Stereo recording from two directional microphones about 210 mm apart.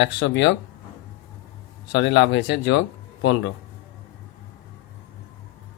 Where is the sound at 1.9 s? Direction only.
60° left (ahead or behind).